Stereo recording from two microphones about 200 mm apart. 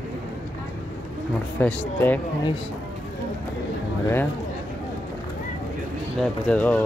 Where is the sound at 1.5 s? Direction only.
10° left (ahead or behind).